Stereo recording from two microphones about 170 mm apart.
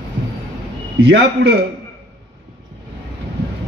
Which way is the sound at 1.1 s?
90° right.